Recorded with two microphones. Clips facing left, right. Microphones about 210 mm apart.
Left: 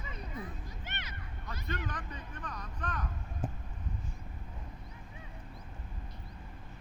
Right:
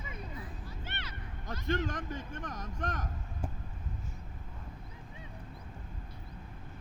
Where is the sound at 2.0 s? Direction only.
90° right.